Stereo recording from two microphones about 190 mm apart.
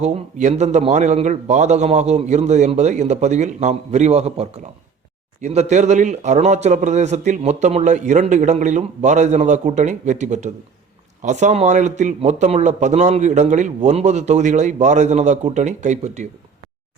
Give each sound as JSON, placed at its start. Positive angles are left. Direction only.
{"t": 0.0, "sound": "speech", "side_deg": -35}